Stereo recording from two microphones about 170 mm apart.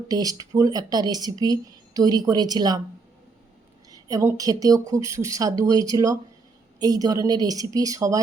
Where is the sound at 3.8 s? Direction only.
20° right (ahead or behind).